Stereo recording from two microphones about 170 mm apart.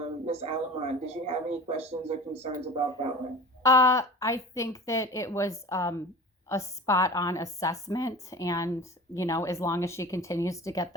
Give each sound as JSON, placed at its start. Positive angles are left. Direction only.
{"t": 0.3, "sound": "speech", "side_deg": -35}
{"t": 3.6, "sound": "a woman's voice", "side_deg": 20}